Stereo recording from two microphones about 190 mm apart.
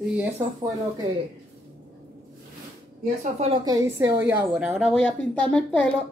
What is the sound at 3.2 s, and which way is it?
Speech, 35° right (ahead or behind).